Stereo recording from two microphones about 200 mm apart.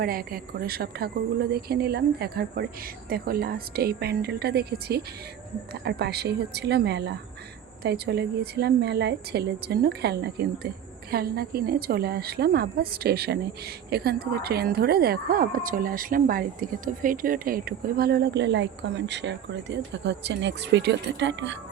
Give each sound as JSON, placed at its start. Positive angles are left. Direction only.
{"t": 0.0, "sound": "speech", "side_deg": -45}